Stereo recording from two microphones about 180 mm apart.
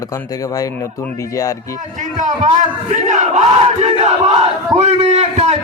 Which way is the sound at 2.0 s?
45° right (ahead or behind).